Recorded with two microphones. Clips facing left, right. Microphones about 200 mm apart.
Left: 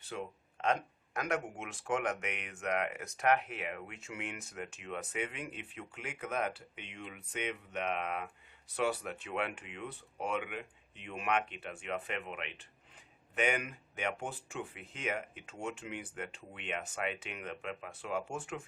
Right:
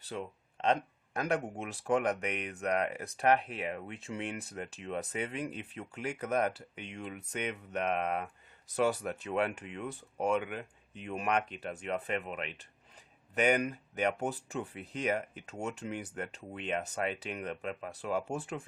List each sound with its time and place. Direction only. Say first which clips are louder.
0.0 s speech: right 2 dB; 35° right (ahead or behind)